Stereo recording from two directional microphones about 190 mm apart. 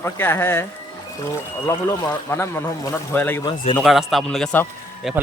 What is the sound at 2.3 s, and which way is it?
Speech, 10° left (ahead or behind).